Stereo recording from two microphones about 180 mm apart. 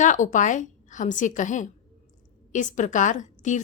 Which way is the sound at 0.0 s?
45° left (ahead or behind).